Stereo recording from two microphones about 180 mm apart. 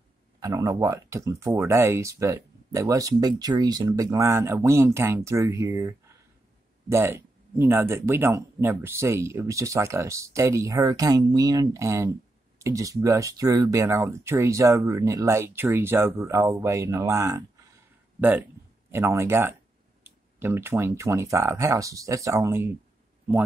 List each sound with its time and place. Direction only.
0.4 s speech: 20° right (ahead or behind)
18.9 s speech: 15° right (ahead or behind)